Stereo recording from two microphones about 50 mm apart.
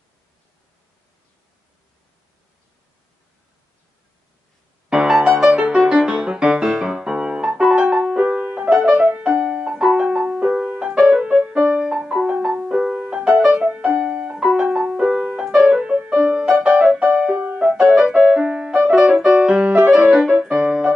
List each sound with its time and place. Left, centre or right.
4.8 s music: centre
14.4 s music: centre
18.9 s piano: centre
19.3 s music: centre
19.9 s music: centre